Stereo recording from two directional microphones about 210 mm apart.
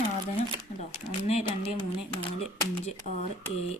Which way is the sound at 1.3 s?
30° left (ahead or behind).